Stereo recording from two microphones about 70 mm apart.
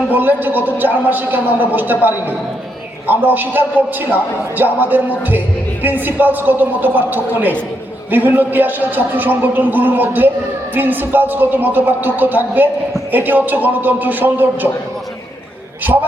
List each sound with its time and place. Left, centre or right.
0.1 s a man's voice: right
15.8 s a man's voice: right